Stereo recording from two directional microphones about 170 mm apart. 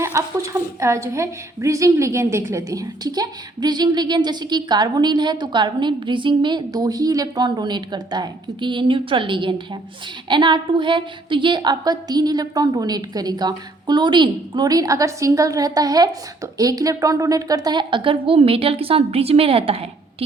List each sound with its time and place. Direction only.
0.0 s a woman's voice: 15° right (ahead or behind); by 20.2 s 35° right (ahead or behind)